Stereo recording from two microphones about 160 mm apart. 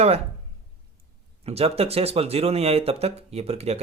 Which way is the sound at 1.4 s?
40° right (ahead or behind).